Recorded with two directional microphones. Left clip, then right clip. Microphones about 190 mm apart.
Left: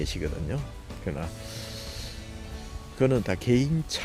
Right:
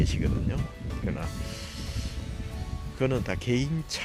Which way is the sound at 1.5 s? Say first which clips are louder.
Left 1 dB; 20° left (ahead or behind).